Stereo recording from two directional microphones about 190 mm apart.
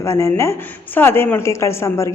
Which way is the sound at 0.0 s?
15° left (ahead or behind).